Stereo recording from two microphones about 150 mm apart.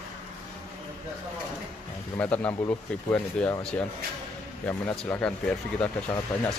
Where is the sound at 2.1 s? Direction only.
10° left (ahead or behind).